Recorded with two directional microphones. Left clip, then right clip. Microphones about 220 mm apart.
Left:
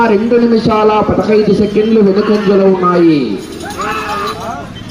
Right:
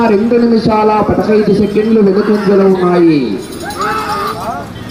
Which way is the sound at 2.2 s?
Centre (ahead or behind).